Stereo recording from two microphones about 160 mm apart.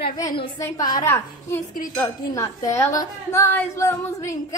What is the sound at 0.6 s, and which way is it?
A woman's voice, 25° left (ahead or behind).